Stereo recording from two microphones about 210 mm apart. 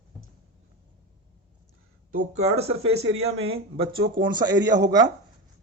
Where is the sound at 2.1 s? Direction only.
30° right (ahead or behind).